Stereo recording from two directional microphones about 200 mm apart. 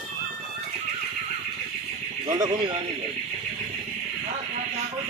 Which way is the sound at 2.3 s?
20° right (ahead or behind).